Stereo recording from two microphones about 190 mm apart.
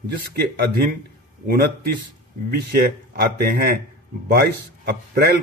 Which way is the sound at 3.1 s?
55° right (ahead or behind).